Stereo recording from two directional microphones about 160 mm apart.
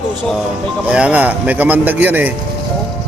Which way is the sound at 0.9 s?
5° right (ahead or behind).